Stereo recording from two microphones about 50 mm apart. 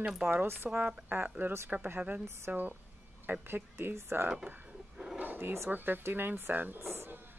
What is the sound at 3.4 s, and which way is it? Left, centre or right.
Speech, right.